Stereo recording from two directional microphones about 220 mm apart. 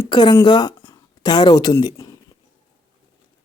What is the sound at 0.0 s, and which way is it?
Speech, 20° left (ahead or behind).